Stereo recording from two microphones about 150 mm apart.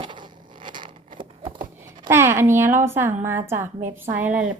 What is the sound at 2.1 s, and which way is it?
A woman's voice, 15° right (ahead or behind).